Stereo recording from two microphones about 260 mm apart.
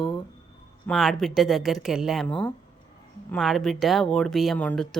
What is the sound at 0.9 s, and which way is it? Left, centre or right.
Speech, centre.